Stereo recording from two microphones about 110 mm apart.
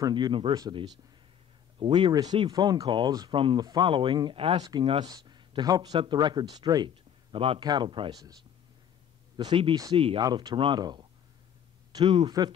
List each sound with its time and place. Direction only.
0.1 s speech: 45° right (ahead or behind)
7.3 s speech: 55° right (ahead or behind)
7.6 s speech: 45° right (ahead or behind)
9.4 s speech: 45° right (ahead or behind)
10.2 s speech: 40° right (ahead or behind)